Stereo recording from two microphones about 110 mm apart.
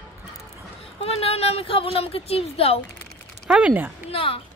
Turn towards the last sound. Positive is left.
turn(degrees=55)  # may be behind; listen again after turning